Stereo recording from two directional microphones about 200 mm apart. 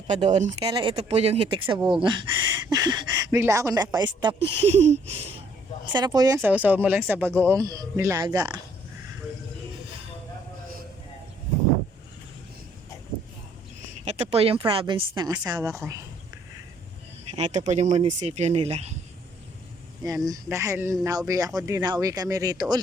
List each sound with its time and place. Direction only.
0.1 s speech: 35° right (ahead or behind)
0.7 s speech: 25° right (ahead or behind)
5.9 s speech: 20° right (ahead or behind)
14.0 s speech: 30° right (ahead or behind); by 16.0 s 15° right (ahead or behind)
17.3 s speech: 35° right (ahead or behind)
20.2 s speech: 15° right (ahead or behind)